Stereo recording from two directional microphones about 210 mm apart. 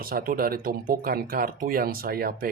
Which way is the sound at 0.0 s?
45° right (ahead or behind).